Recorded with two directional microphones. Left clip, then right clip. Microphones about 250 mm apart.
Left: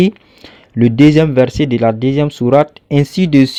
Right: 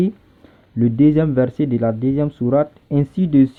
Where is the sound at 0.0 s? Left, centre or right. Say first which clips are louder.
Left 8 dB; left.